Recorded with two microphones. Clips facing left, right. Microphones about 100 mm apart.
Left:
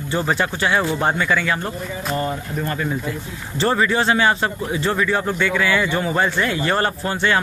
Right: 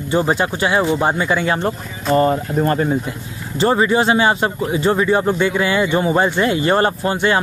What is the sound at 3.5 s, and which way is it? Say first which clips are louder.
Speech: right 4 dB; 15° right (ahead or behind).